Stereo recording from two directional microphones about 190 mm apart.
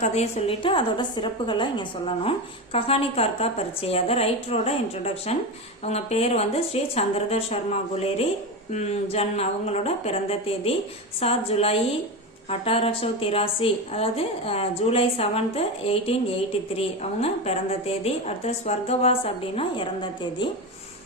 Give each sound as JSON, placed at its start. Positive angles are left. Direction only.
{"t": 0.0, "sound": "a woman's voice", "side_deg": 35}